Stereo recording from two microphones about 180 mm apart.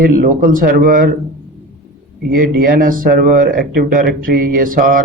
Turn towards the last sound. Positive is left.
turn(degrees=-50)  # may be behind; listen again after turning